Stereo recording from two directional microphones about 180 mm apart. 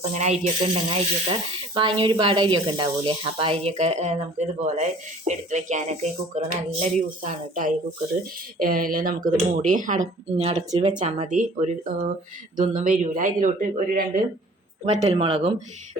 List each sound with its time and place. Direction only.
0.1 s speech: 40° right (ahead or behind)
15.0 s speech: 30° right (ahead or behind)